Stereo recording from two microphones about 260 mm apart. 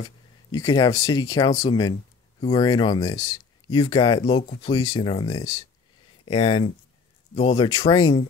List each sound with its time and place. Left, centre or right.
0.0 s speech: centre